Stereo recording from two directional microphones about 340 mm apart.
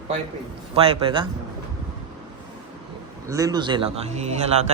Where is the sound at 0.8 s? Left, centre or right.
Centre.